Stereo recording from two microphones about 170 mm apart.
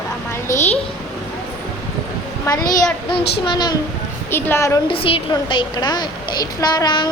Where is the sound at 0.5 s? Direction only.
40° left (ahead or behind).